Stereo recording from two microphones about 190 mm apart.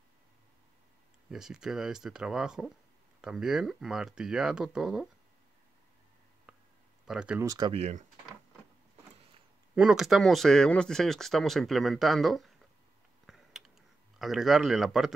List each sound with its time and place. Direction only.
1.3 s speech: 5° right (ahead or behind)
7.1 s speech: 5° right (ahead or behind)
7.4 s speech: 20° right (ahead or behind)
9.8 s speech: 5° right (ahead or behind)
13.3 s a sound: centre (ahead or behind)
14.1 s speech: centre (ahead or behind)